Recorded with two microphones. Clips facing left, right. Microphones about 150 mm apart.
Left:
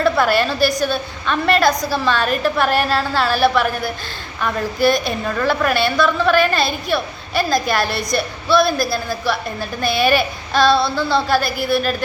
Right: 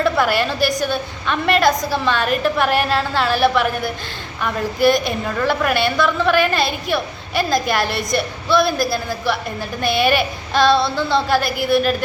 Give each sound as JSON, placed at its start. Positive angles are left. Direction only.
{"t": 0.0, "sound": "a woman's voice", "side_deg": -15}
{"t": 4.8, "sound": "a woman's voice", "side_deg": -15}
{"t": 9.8, "sound": "child singing", "side_deg": -20}